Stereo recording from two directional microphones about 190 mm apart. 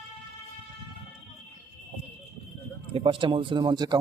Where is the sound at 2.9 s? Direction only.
30° right (ahead or behind).